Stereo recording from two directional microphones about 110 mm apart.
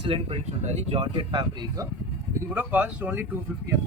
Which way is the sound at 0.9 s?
45° right (ahead or behind).